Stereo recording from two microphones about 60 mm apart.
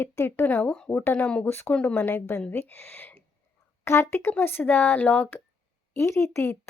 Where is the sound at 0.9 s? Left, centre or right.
Left.